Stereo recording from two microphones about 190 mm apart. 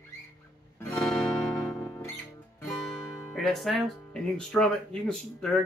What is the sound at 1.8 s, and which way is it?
Music, 15° left (ahead or behind).